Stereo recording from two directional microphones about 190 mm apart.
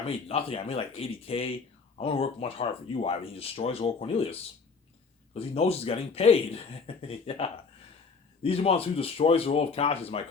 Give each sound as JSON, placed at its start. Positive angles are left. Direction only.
{"t": 0.0, "sound": "speech", "side_deg": 30}